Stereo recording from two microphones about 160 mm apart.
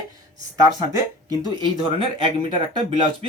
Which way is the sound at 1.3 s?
25° right (ahead or behind).